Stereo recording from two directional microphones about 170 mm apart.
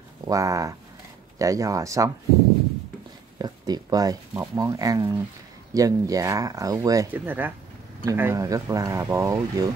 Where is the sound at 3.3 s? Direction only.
25° right (ahead or behind).